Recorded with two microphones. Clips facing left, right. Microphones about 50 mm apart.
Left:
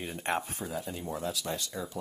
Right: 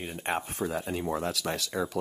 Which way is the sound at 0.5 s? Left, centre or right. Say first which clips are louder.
Right 5 dB; right.